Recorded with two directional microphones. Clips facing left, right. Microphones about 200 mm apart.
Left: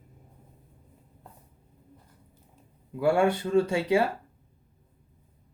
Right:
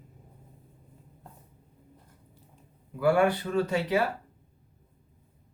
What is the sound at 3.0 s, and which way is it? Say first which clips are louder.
Speech: even; 25° left (ahead or behind).